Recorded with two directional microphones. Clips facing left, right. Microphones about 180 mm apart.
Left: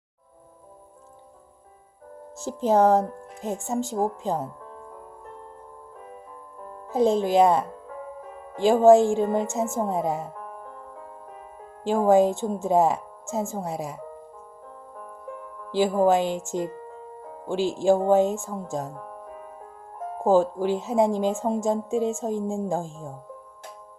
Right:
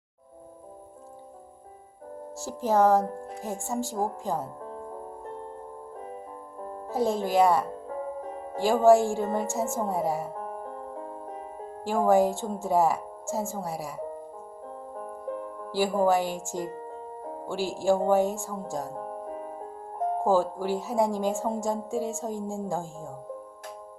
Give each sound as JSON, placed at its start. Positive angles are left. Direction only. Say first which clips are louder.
{"t": 2.3, "sound": "a woman's voice", "louder": "left 4 dB", "side_deg": 20}
{"t": 4.6, "sound": "music", "louder": "right 5 dB", "side_deg": -35}
{"t": 6.9, "sound": "a woman's voice", "louder": "left 5 dB", "side_deg": 20}
{"t": 7.7, "sound": "music", "louder": "right 4 dB", "side_deg": -35}
{"t": 8.6, "sound": "a woman's voice", "louder": "left 4 dB", "side_deg": 20}
{"t": 10.3, "sound": "music", "louder": "right 4 dB", "side_deg": -35}
{"t": 11.8, "sound": "a woman's voice", "louder": "left 3 dB", "side_deg": 20}
{"t": 14.7, "sound": "music", "louder": "right 5 dB", "side_deg": -35}
{"t": 15.7, "sound": "a woman's voice", "louder": "left 3 dB", "side_deg": 20}
{"t": 16.6, "sound": "music", "louder": "even", "side_deg": -35}
{"t": 17.5, "sound": "a woman's voice", "louder": "left 4 dB", "side_deg": 20}
{"t": 18.9, "sound": "music", "louder": "right 4 dB", "side_deg": -35}
{"t": 20.2, "sound": "a woman's voice", "louder": "left 6 dB", "side_deg": 20}